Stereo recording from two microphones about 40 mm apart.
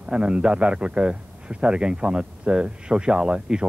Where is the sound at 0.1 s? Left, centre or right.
Right.